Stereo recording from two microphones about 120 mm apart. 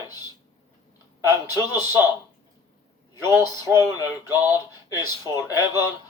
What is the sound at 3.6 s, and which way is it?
Speech, 25° right (ahead or behind).